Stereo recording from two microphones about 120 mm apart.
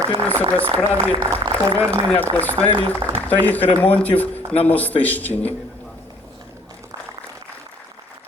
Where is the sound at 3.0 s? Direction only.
40° right (ahead or behind).